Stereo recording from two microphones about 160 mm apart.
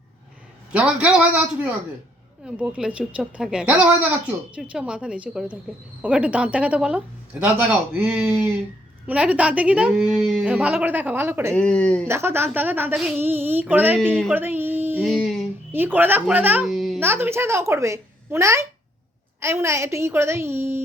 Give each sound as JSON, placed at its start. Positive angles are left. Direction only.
{"t": 0.7, "sound": "a woman's voice", "side_deg": -5}
{"t": 2.4, "sound": "a woman's voice", "side_deg": -5}
{"t": 11.5, "sound": "speech", "side_deg": 5}
{"t": 12.0, "sound": "a woman's voice", "side_deg": -15}
{"t": 14.3, "sound": "a sound", "side_deg": -10}
{"t": 15.0, "sound": "music", "side_deg": 0}
{"t": 15.7, "sound": "a woman's voice", "side_deg": -10}
{"t": 16.6, "sound": "a sound", "side_deg": 0}
{"t": 17.0, "sound": "a woman's voice", "side_deg": -15}